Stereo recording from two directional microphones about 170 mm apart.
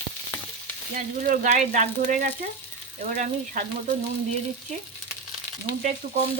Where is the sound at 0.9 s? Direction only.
50° right (ahead or behind).